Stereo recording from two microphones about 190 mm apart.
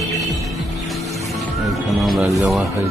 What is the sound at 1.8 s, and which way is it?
Speech, centre (ahead or behind).